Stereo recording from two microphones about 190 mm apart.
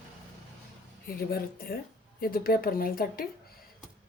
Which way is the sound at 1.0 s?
50° left (ahead or behind).